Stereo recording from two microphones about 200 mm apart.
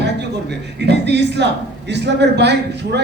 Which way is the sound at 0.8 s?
60° right (ahead or behind).